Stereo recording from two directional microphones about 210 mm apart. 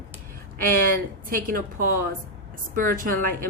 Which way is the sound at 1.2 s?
40° right (ahead or behind).